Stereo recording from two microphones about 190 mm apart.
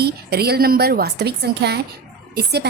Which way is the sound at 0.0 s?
55° right (ahead or behind).